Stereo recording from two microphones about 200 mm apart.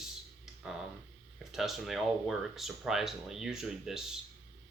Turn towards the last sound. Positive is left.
turn(degrees=0)  # may be behind; listen again after turning